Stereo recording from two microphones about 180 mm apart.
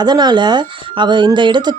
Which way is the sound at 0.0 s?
25° right (ahead or behind).